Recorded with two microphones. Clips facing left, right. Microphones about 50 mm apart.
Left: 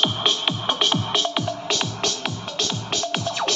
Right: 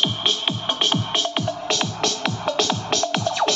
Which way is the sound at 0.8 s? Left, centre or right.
Centre.